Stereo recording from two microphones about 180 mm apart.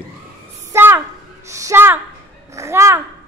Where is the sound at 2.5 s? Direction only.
15° right (ahead or behind).